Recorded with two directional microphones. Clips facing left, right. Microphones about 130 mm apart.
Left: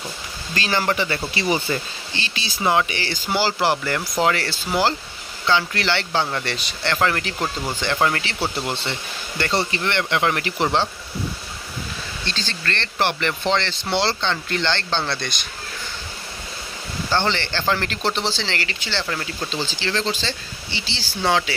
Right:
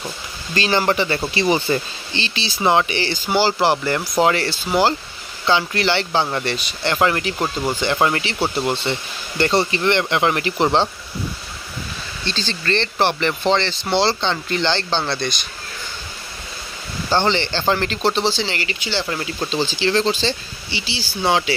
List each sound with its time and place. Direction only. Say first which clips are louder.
0.6 s speech: right 4 dB; 25° right (ahead or behind)
12.4 s speech: right 8 dB; 15° right (ahead or behind)
17.1 s speech: right 4 dB; 15° right (ahead or behind)